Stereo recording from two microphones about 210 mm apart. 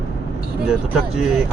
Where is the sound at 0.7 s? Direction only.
5° right (ahead or behind).